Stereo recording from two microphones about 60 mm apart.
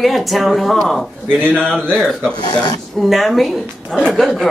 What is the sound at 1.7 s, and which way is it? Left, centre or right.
A man's voice, centre.